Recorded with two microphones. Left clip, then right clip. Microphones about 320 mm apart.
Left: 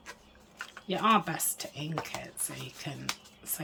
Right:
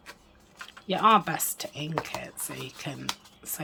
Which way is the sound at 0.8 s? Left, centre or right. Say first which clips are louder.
Right 5 dB; centre.